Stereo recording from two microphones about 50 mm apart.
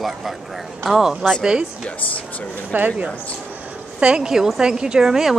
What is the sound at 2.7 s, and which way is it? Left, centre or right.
Speech, right.